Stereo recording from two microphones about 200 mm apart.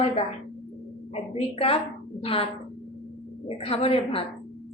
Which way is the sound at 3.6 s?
30° left (ahead or behind).